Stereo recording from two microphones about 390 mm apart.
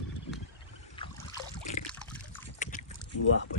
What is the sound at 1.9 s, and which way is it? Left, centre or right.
Trickle, centre.